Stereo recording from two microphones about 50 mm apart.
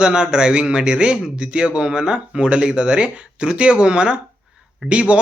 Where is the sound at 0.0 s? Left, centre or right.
Centre.